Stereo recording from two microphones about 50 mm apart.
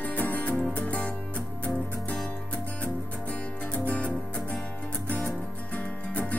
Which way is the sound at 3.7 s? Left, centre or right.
Left.